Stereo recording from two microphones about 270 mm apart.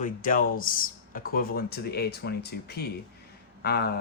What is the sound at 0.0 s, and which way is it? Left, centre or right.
Speech, left.